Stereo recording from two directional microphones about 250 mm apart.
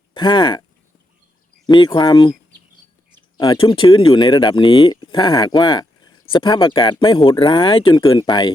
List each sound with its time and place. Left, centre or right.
0.1 s speech: centre
1.6 s speech: centre
3.3 s speech: centre